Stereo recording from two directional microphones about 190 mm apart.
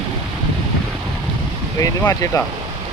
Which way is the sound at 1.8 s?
15° left (ahead or behind).